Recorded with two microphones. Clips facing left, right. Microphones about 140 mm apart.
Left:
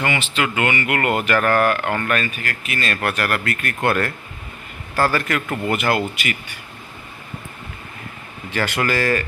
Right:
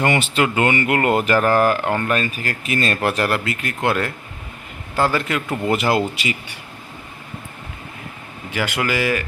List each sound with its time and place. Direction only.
0.0 s speech: 40° right (ahead or behind); by 5.7 s 15° right (ahead or behind)
5.7 s speech: 30° right (ahead or behind)
8.4 s speech: 15° right (ahead or behind)